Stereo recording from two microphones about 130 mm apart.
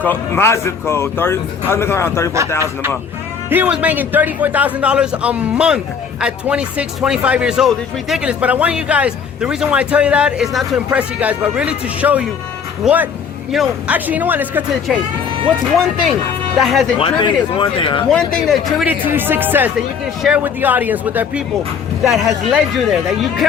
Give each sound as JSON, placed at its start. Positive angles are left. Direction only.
{"t": 0.0, "sound": "speech", "side_deg": 15}
{"t": 3.5, "sound": "a man's voice", "side_deg": -10}
{"t": 10.9, "sound": "a man's voice", "side_deg": -10}
{"t": 13.9, "sound": "a man's voice", "side_deg": -15}
{"t": 16.6, "sound": "speech", "side_deg": 0}
{"t": 17.0, "sound": "speech", "side_deg": 35}
{"t": 18.1, "sound": "speech", "side_deg": 5}
{"t": 18.9, "sound": "a man's voice", "side_deg": -15}
{"t": 22.0, "sound": "speech", "side_deg": 0}